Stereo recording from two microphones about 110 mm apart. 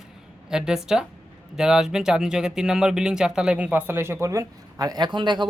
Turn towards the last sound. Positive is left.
turn(degrees=-45)  # may be behind; listen again after turning